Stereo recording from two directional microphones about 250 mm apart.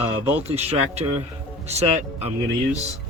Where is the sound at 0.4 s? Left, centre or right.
Right.